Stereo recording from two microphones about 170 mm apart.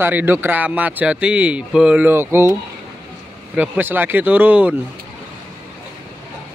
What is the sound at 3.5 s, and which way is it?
Speech, 10° right (ahead or behind).